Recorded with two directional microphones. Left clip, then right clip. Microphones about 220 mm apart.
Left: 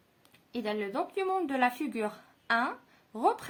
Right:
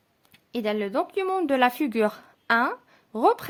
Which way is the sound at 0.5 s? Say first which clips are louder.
Right 7 dB; 50° right (ahead or behind).